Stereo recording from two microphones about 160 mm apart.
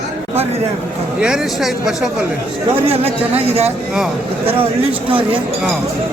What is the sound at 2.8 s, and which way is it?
Speech, 35° right (ahead or behind).